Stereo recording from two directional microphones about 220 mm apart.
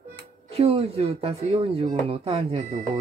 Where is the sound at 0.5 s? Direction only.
25° right (ahead or behind).